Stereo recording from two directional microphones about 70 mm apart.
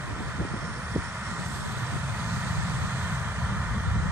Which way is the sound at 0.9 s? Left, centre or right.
Right.